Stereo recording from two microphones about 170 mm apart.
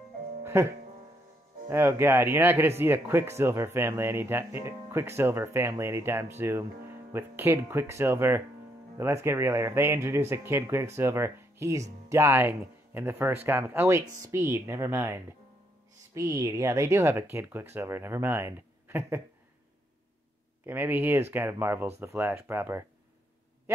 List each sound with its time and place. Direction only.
0.4 s music: 15° right (ahead or behind)
1.7 s speech: 15° right (ahead or behind)
20.6 s speech: 10° right (ahead or behind)